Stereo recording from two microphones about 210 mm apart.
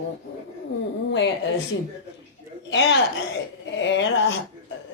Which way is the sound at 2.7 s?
55° left (ahead or behind).